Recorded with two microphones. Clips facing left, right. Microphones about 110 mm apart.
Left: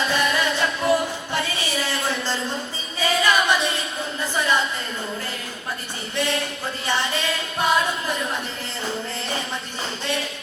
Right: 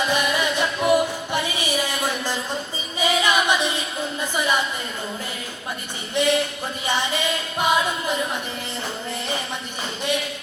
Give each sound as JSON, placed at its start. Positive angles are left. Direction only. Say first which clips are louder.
{"t": 0.1, "sound": "music", "louder": "even", "side_deg": -15}
{"t": 3.0, "sound": "singing", "louder": "even", "side_deg": -15}
{"t": 4.2, "sound": "a sound", "louder": "left 1 dB", "side_deg": -15}
{"t": 6.2, "sound": "music", "louder": "right 5 dB", "side_deg": -15}